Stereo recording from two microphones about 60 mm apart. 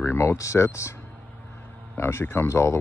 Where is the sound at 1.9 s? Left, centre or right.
Left.